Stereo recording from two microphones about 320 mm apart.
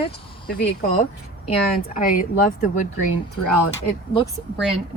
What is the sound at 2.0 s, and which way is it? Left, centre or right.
Speech, left.